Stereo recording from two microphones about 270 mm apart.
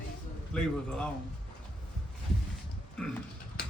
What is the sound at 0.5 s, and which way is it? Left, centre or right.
Speech, centre.